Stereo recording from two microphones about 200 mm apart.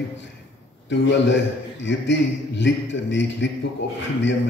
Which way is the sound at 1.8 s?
65° left (ahead or behind).